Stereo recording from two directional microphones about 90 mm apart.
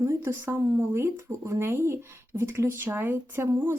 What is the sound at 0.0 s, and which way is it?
Speech, 30° right (ahead or behind).